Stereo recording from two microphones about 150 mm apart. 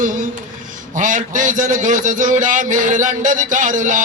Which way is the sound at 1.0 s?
60° right (ahead or behind).